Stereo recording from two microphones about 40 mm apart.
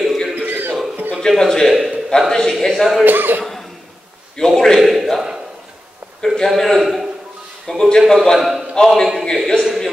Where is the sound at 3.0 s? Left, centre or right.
Right.